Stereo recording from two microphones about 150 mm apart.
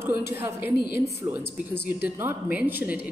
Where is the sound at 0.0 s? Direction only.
15° right (ahead or behind).